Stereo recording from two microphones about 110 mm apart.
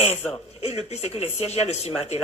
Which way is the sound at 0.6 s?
75° left (ahead or behind).